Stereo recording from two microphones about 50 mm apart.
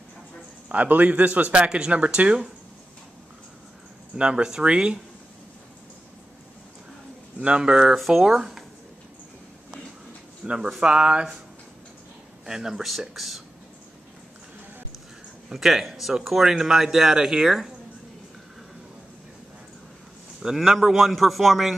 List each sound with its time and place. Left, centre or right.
0.7 s speech: right
4.2 s speech: centre
7.3 s speech: right
7.9 s speech: centre
10.4 s speech: centre
12.4 s speech: centre
15.5 s speech: centre
20.4 s speech: centre